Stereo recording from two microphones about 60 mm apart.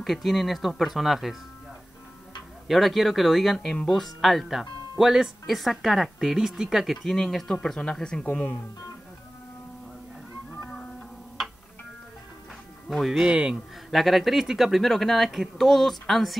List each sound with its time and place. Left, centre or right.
0.0 s speech: centre
2.7 s speech: centre
7.1 s speech: centre
8.3 s speech: left
12.9 s speech: centre
13.2 s speech: centre
13.8 s speech: centre